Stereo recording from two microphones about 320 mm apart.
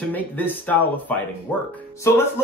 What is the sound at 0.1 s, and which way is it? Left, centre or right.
Speech, centre.